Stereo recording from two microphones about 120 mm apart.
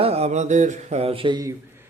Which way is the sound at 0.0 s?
60° right (ahead or behind).